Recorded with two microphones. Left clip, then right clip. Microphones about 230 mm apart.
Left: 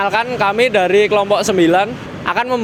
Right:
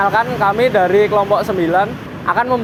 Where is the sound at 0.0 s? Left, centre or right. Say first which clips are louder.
Right 1 dB; left.